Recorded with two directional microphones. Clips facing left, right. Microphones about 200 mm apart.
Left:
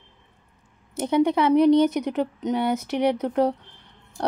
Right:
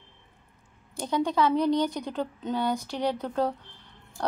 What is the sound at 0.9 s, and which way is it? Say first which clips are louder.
A woman's voice: left 6 dB; 20° left (ahead or behind).